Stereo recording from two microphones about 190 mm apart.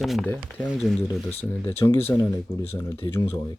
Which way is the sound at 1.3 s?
10° left (ahead or behind).